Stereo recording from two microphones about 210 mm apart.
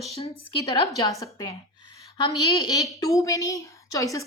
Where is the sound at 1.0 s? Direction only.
15° left (ahead or behind).